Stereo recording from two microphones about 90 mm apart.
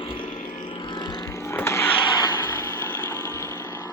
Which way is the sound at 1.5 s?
25° left (ahead or behind).